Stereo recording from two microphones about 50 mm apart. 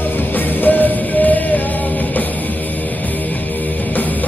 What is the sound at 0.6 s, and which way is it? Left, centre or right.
Music, left.